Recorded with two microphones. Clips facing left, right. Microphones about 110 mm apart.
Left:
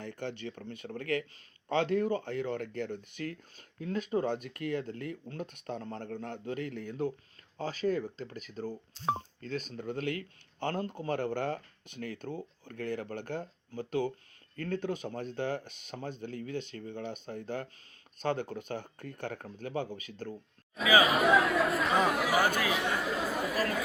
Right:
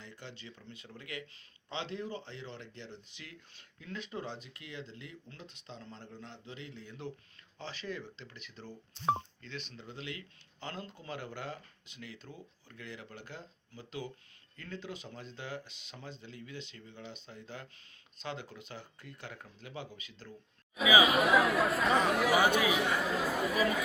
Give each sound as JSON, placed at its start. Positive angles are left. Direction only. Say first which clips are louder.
{"t": 0.0, "sound": "speech", "louder": "left 11 dB", "side_deg": 55}
{"t": 21.0, "sound": "speech", "louder": "left 1 dB", "side_deg": 0}